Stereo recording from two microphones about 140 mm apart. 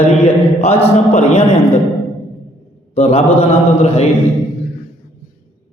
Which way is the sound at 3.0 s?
45° left (ahead or behind).